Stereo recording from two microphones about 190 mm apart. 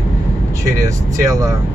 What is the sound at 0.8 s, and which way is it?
Speech, 15° right (ahead or behind).